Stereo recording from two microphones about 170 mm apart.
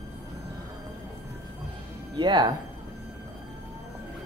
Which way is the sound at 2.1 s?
25° right (ahead or behind).